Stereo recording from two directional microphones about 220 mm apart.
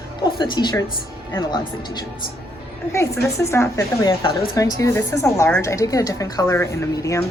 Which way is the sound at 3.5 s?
15° left (ahead or behind).